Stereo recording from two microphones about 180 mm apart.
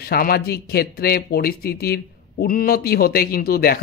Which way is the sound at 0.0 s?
55° left (ahead or behind).